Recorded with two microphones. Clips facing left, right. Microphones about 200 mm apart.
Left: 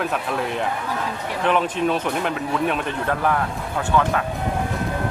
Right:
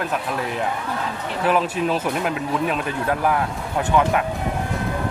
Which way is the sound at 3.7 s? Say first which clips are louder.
Right 2 dB; 15° right (ahead or behind).